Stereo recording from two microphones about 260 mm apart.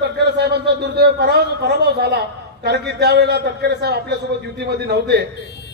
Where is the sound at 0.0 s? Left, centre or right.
Right.